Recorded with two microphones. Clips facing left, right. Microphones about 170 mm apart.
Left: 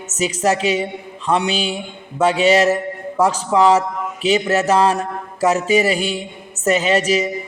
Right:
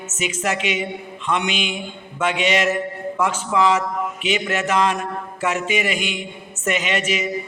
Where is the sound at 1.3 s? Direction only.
35° left (ahead or behind).